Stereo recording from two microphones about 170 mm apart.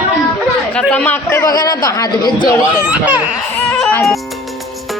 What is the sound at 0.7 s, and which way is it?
A man's voice, 5° left (ahead or behind).